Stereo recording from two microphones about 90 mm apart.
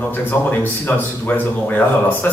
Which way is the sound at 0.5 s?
25° left (ahead or behind).